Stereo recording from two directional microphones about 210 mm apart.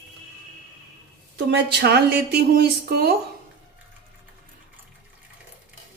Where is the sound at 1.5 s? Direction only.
50° right (ahead or behind).